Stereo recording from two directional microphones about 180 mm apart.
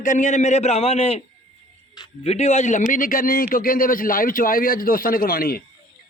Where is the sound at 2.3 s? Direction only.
40° left (ahead or behind).